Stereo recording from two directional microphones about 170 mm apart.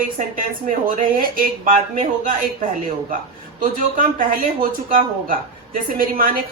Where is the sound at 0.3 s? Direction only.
55° right (ahead or behind).